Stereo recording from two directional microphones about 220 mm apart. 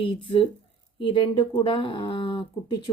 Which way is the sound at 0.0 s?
25° left (ahead or behind).